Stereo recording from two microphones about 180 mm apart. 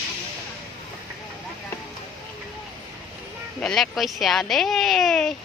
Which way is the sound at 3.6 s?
Centre (ahead or behind).